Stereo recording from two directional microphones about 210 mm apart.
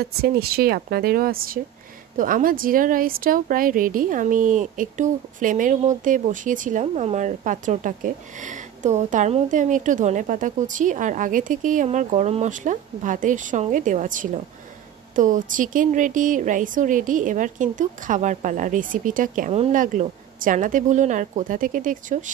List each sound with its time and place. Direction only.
0.0 s a woman's voice: 45° right (ahead or behind)